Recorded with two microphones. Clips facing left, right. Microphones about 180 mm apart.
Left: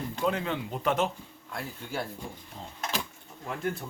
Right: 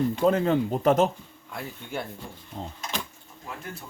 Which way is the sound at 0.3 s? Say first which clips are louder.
Right 7 dB; 40° right (ahead or behind).